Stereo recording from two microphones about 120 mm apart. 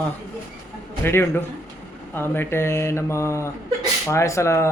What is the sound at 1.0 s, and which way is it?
Mantra, 20° left (ahead or behind).